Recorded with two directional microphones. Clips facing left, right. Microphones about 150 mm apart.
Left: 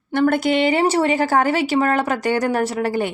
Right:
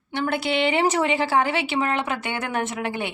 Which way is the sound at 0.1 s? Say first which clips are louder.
Left 7 dB; 50° left (ahead or behind).